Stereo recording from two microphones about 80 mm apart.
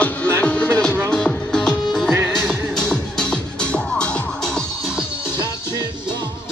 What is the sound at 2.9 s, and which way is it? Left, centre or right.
Music, centre.